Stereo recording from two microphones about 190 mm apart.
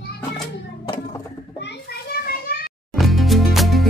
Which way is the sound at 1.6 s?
60° left (ahead or behind).